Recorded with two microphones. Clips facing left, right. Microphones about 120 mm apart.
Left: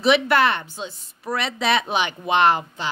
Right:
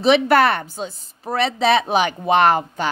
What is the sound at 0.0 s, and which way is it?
A woman's voice, 40° right (ahead or behind).